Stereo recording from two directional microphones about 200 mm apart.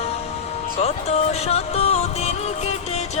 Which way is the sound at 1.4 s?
30° left (ahead or behind).